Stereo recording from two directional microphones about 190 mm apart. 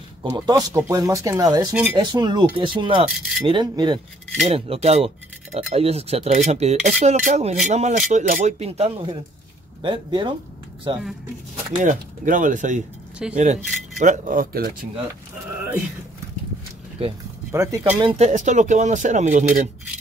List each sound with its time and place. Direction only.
0.2 s speech: 20° right (ahead or behind)
3.1 s speech: centre (ahead or behind)
3.4 s speech: 25° right (ahead or behind)
11.8 s speech: 45° right (ahead or behind)
13.2 s speech: 5° right (ahead or behind)
13.9 s speech: 40° right (ahead or behind)
17.0 s speech: 30° right (ahead or behind)
17.5 s speech: 15° right (ahead or behind)
18.1 s speech: 40° right (ahead or behind)